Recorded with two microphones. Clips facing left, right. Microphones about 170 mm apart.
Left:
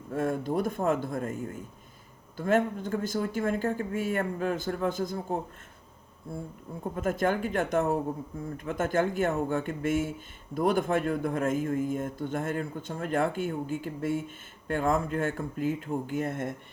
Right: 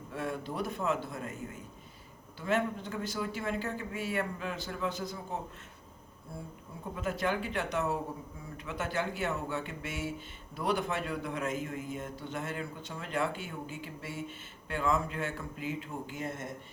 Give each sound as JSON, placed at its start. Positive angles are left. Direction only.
{"t": 0.1, "sound": "speech", "side_deg": 45}
{"t": 2.4, "sound": "speech", "side_deg": 50}
{"t": 6.9, "sound": "speech", "side_deg": 45}